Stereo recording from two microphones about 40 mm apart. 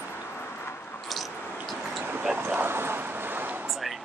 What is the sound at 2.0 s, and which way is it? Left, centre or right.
Vehicle, right.